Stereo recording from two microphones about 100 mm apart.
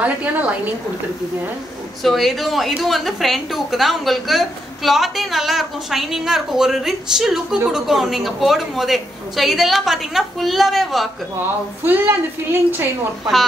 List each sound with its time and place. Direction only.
0.0 s a woman's voice: 15° right (ahead or behind)
2.0 s a woman's voice: centre (ahead or behind)
11.8 s a woman's voice: 20° right (ahead or behind)